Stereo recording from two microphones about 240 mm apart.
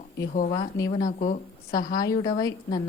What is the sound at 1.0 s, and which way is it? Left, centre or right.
Speech, left.